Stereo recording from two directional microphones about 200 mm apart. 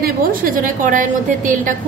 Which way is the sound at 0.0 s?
45° right (ahead or behind).